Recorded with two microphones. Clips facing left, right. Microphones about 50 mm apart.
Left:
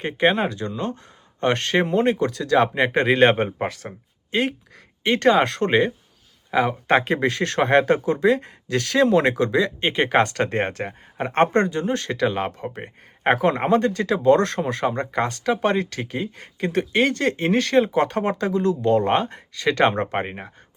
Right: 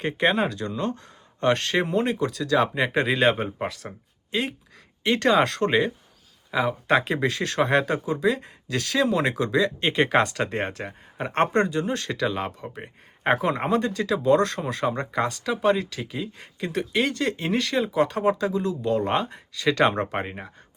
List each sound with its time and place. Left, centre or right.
0.0 s speech: left
10.2 s speech: left
16.6 s speech: left
18.9 s speech: left
19.6 s speech: left